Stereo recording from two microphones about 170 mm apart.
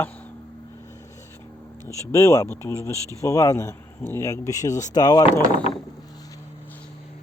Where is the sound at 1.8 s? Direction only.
20° left (ahead or behind).